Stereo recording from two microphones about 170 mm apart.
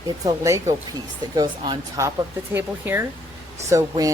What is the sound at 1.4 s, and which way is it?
Speech, 25° right (ahead or behind).